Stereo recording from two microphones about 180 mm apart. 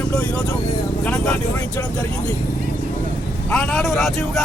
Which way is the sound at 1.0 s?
5° left (ahead or behind).